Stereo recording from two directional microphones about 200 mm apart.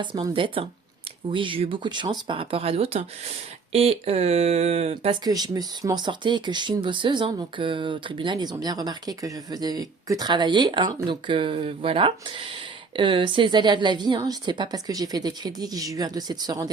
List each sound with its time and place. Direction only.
0.0 s speech: 20° right (ahead or behind)
5.2 s speech: 20° right (ahead or behind)